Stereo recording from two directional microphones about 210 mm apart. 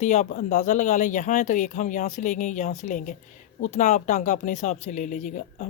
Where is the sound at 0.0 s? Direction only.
35° left (ahead or behind).